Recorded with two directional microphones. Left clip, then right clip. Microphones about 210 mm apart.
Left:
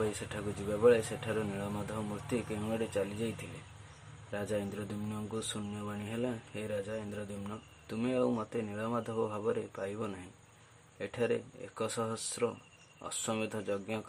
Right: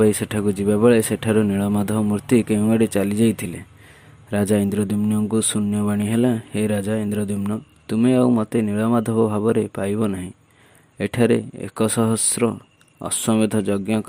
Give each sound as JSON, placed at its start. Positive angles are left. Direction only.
{"t": 0.0, "sound": "speech", "side_deg": -45}